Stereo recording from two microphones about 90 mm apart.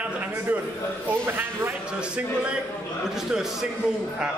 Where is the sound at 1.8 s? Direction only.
10° right (ahead or behind).